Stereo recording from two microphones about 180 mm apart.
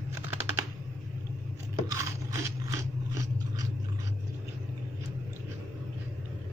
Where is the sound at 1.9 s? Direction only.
20° right (ahead or behind).